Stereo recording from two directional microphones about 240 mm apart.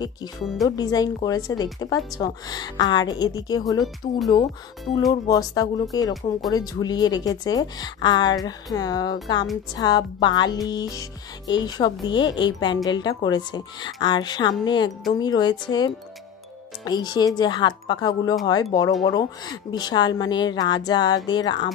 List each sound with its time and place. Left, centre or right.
0.7 s speech: centre
16.8 s speech: centre